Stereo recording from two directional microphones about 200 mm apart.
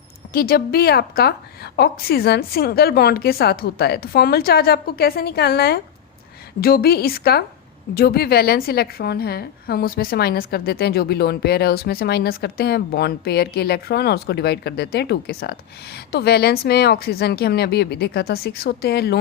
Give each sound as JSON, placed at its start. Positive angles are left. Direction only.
{"t": 0.3, "sound": "a woman's voice", "side_deg": 50}